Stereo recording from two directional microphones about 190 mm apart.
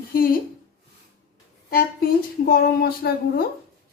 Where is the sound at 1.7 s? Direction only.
50° left (ahead or behind).